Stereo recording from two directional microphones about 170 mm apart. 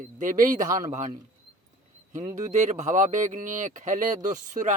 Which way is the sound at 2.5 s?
45° right (ahead or behind).